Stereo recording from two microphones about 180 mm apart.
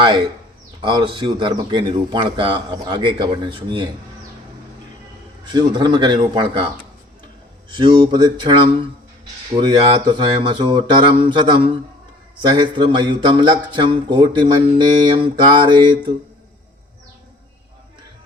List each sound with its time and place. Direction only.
0.8 s speech: 25° right (ahead or behind)
5.5 s speech: 25° right (ahead or behind)
7.7 s speech: 25° right (ahead or behind)